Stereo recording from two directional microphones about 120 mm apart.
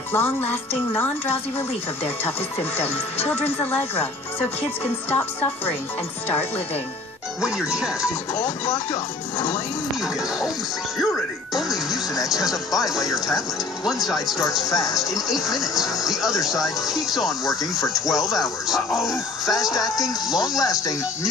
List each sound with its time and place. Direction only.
0.1 s speech: 15° left (ahead or behind)
3.3 s speech: 15° left (ahead or behind)
7.4 s speech: 5° right (ahead or behind)
8.0 s speech: 25° left (ahead or behind)
11.5 s speech: centre (ahead or behind)